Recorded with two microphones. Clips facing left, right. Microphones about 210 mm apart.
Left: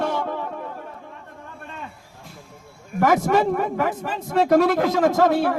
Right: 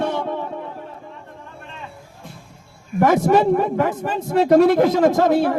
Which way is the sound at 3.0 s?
30° right (ahead or behind).